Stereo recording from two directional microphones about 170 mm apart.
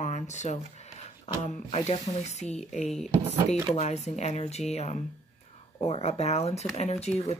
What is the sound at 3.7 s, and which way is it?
Speech, 40° left (ahead or behind).